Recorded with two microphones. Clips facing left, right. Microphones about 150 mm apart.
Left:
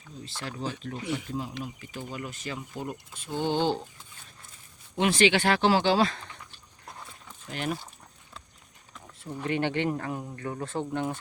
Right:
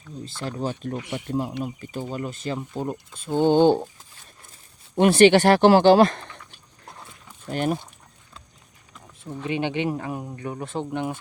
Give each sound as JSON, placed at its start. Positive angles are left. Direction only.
{"t": 0.3, "sound": "speech", "side_deg": -40}
{"t": 1.8, "sound": "speech", "side_deg": -40}
{"t": 4.9, "sound": "speech", "side_deg": -55}
{"t": 7.4, "sound": "speech", "side_deg": -45}
{"t": 9.2, "sound": "speech", "side_deg": -15}